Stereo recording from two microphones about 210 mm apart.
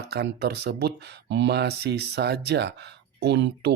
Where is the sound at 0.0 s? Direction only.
50° right (ahead or behind).